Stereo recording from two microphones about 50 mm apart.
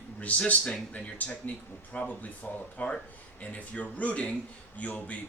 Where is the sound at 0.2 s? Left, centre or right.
Left.